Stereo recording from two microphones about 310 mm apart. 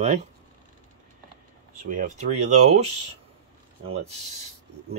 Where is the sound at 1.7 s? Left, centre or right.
Right.